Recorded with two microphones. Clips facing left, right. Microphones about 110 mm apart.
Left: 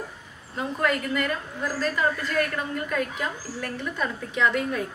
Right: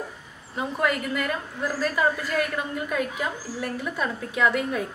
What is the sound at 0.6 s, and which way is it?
A woman's voice, 5° right (ahead or behind).